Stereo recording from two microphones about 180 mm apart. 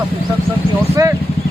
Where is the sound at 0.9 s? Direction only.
15° right (ahead or behind).